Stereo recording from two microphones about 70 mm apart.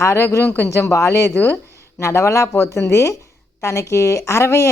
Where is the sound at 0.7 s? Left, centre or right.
Left.